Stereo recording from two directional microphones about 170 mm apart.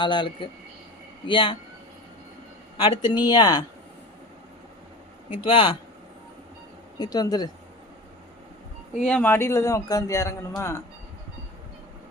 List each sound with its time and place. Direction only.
0.0 s speech: 30° left (ahead or behind)
2.7 s speech: 30° left (ahead or behind)
5.5 s speech: 30° left (ahead or behind)
7.0 s speech: 20° left (ahead or behind)
9.0 s a man's voice: 10° left (ahead or behind)